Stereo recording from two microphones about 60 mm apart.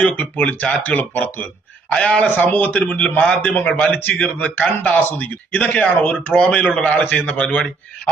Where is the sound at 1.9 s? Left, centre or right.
Centre.